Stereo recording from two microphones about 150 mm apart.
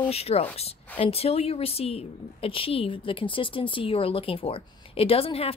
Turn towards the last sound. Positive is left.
turn(degrees=40)  # may be behind; listen again after turning